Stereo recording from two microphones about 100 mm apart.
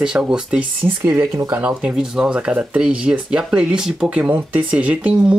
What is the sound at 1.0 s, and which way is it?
Speech, 25° right (ahead or behind).